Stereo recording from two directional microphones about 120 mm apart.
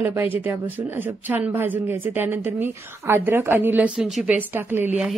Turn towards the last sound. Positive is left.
turn(degrees=-15)  # may be behind; listen again after turning